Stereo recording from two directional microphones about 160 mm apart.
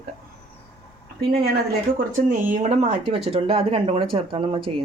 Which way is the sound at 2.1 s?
50° right (ahead or behind).